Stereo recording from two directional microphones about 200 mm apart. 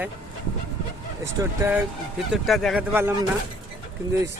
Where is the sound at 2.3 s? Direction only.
Centre (ahead or behind).